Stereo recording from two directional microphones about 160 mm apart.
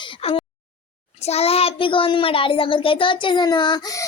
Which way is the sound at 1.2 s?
40° left (ahead or behind).